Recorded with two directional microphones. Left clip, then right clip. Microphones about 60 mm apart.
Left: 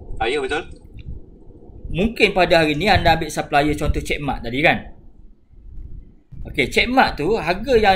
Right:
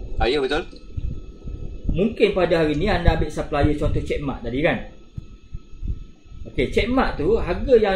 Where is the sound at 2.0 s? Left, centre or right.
Left.